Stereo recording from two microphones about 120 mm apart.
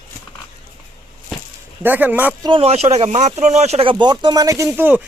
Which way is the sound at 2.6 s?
55° right (ahead or behind).